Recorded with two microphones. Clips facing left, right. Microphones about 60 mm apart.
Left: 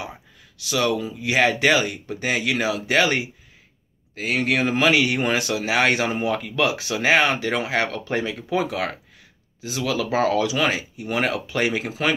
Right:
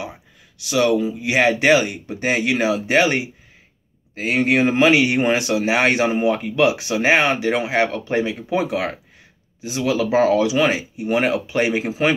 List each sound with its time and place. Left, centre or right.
0.6 s speech: right